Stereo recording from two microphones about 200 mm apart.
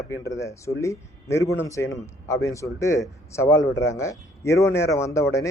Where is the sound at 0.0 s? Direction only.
15° left (ahead or behind).